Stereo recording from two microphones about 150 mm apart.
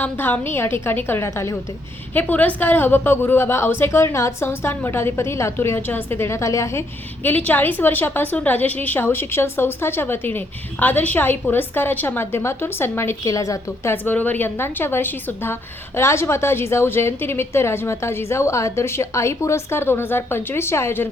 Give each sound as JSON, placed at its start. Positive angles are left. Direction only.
{"t": 0.0, "sound": "a woman's voice", "side_deg": 10}